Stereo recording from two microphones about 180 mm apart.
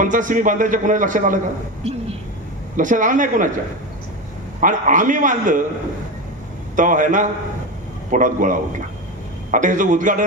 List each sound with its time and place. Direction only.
0.0 s a man's voice: 45° right (ahead or behind)
2.7 s a man's voice: 45° right (ahead or behind)
4.6 s a man's voice: 45° right (ahead or behind)
6.7 s a man's voice: 45° right (ahead or behind)